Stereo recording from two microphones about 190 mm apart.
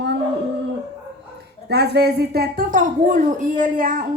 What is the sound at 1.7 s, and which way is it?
A woman's voice, 60° right (ahead or behind).